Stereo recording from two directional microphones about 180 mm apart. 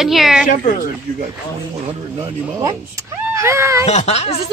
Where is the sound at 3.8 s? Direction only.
35° left (ahead or behind).